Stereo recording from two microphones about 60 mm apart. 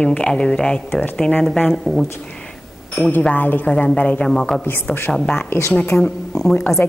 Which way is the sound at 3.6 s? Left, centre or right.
Centre.